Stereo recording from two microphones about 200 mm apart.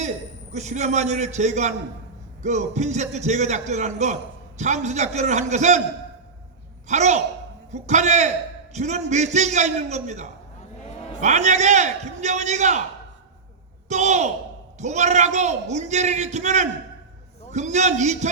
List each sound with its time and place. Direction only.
0.5 s a man's voice: 35° right (ahead or behind)
6.8 s a man's voice: 35° right (ahead or behind)
13.8 s a woman's voice: 35° right (ahead or behind)